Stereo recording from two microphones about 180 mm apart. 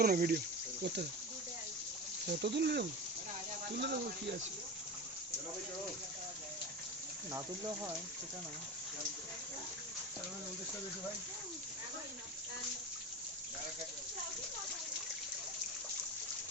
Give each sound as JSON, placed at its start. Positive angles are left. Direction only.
{"t": 0.0, "sound": "speech", "side_deg": -55}
{"t": 2.2, "sound": "speech", "side_deg": -70}